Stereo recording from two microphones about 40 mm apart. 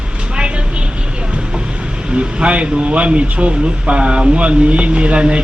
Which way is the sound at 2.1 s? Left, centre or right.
Right.